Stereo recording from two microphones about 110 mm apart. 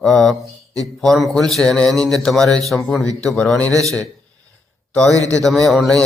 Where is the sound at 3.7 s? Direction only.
30° right (ahead or behind).